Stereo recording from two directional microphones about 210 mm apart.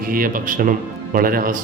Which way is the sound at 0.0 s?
45° right (ahead or behind).